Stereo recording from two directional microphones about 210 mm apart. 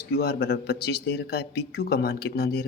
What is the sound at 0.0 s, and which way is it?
A man's voice, 50° left (ahead or behind).